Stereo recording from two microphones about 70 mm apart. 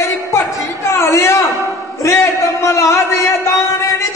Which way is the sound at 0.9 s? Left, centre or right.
Left.